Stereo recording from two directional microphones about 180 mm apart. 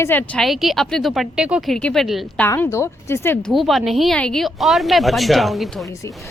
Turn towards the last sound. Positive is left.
turn(degrees=0)  # may be behind; listen again after turning